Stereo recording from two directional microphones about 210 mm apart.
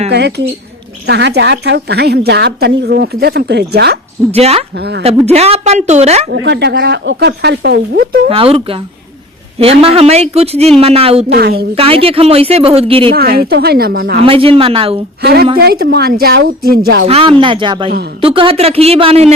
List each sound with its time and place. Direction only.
0.1 s a woman's voice: 55° right (ahead or behind)
4.3 s speech: 30° right (ahead or behind)
4.8 s a woman's voice: 55° right (ahead or behind)
5.2 s a woman's voice: 30° right (ahead or behind)
6.3 s a woman's voice: 55° right (ahead or behind)
8.3 s speech: 25° right (ahead or behind)
11.3 s a woman's voice: 50° right (ahead or behind)
11.7 s speech: 25° right (ahead or behind)
13.1 s a woman's voice: 45° right (ahead or behind)
14.2 s speech: 25° right (ahead or behind)
15.2 s a woman's voice: 50° right (ahead or behind)
17.1 s speech: 25° right (ahead or behind)